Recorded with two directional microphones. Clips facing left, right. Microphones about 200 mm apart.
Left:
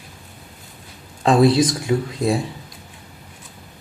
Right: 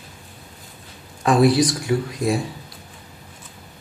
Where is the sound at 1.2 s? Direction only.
20° left (ahead or behind).